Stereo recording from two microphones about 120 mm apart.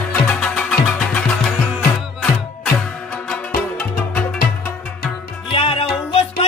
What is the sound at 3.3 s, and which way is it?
Music, 10° left (ahead or behind).